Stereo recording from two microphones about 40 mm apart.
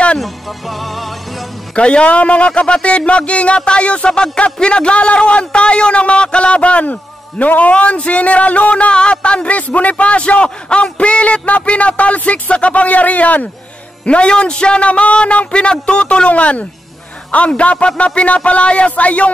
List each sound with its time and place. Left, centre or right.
0.2 s music: centre
1.8 s a man's voice: left
9.6 s a man's voice: left
14.0 s a man's voice: left